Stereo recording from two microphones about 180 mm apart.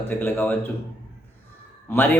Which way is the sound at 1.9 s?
10° left (ahead or behind).